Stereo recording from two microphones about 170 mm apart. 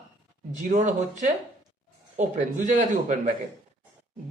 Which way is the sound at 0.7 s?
45° right (ahead or behind).